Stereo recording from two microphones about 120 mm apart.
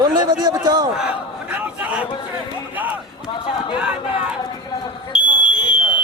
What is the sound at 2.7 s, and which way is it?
Speech, 15° right (ahead or behind).